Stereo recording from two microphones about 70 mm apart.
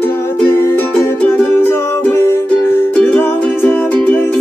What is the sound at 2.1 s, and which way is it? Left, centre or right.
Music, left.